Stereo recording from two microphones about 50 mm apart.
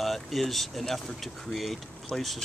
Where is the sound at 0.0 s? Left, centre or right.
Centre.